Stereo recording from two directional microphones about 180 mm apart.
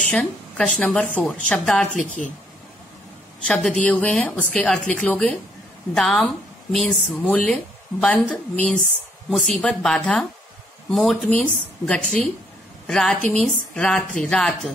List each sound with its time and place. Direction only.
0.0 s a woman's voice: 5° left (ahead or behind)
2.0 s a woman's voice: 45° left (ahead or behind)
3.4 s a woman's voice: centre (ahead or behind)